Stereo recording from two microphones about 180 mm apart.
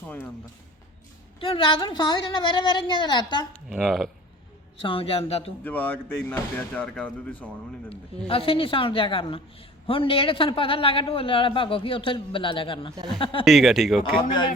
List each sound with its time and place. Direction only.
1.4 s a woman's voice: 30° left (ahead or behind)
3.7 s speech: centre (ahead or behind)
4.8 s a man's voice: 30° left (ahead or behind)
5.6 s speech: 10° left (ahead or behind)
8.3 s a woman's voice: 30° left (ahead or behind)
13.4 s speech: centre (ahead or behind)
14.0 s a woman's voice: 25° left (ahead or behind)